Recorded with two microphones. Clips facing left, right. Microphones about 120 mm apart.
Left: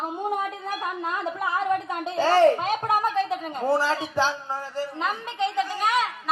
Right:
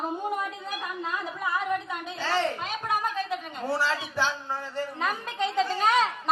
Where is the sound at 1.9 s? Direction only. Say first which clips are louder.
Left 8 dB; 45° left (ahead or behind); by 6.1 s 15° left (ahead or behind).